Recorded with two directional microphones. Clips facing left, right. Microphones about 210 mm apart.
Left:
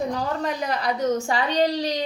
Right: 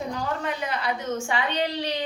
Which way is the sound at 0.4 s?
40° left (ahead or behind).